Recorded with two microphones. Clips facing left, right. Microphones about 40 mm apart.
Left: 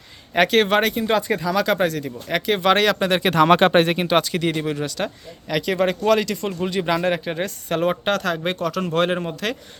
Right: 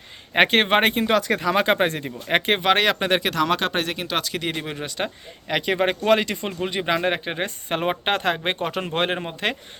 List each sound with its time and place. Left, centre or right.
0.3 s speech: right
1.3 s speech: right
2.6 s speech: centre
3.4 s speech: left; by 4.2 s centre
4.2 s speech: centre; by 9.6 s right